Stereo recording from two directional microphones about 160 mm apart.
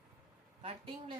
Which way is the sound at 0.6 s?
35° right (ahead or behind).